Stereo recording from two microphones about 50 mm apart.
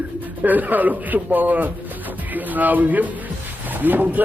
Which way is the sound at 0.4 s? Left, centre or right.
Right.